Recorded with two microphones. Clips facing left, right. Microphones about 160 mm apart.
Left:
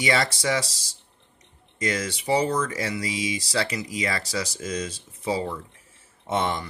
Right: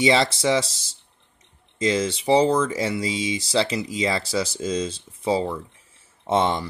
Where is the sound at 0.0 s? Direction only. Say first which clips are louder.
Right 5 dB; 25° right (ahead or behind).